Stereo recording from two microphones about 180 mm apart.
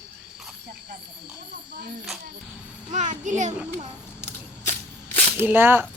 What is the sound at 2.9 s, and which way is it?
Speech, 45° right (ahead or behind).